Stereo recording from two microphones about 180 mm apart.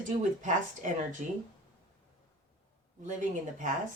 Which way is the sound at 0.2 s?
45° right (ahead or behind).